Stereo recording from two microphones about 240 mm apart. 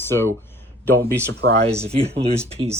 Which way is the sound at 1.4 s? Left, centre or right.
Right.